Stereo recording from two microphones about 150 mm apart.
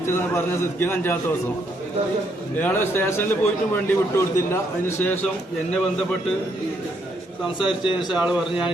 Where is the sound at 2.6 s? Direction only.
10° left (ahead or behind).